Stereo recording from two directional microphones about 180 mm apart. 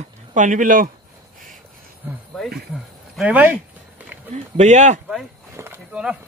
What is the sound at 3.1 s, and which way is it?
Speech, 10° right (ahead or behind).